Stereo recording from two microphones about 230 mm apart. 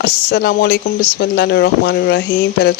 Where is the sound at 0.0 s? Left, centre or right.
Left.